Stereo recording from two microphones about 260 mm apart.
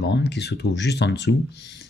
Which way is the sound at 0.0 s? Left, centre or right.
Left.